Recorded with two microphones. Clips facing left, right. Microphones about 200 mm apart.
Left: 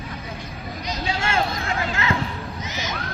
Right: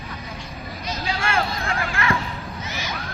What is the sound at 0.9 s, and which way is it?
Vehicle, 25° left (ahead or behind).